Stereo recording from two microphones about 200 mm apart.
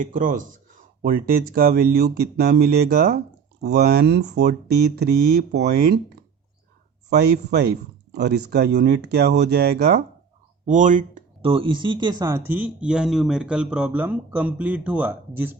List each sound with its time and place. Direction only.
0.0 s speech: 45° right (ahead or behind)
7.1 s speech: 55° right (ahead or behind)
10.7 s speech: 40° right (ahead or behind)
11.4 s speech: 25° right (ahead or behind); by 15.5 s 10° right (ahead or behind)